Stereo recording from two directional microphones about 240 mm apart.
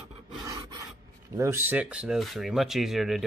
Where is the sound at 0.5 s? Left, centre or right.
Centre.